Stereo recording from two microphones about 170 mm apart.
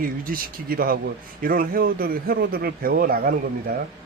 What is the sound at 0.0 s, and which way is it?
A man's voice, 55° right (ahead or behind).